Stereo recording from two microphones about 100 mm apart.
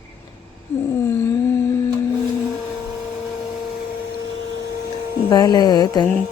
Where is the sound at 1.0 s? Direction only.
25° left (ahead or behind).